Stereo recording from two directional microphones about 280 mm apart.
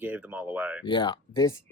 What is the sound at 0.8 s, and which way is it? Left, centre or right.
Speech, centre.